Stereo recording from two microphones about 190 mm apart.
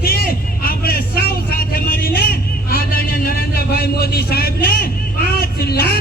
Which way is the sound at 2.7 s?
50° left (ahead or behind).